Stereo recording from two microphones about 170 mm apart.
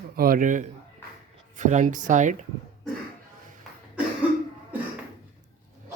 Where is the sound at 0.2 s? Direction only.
55° right (ahead or behind).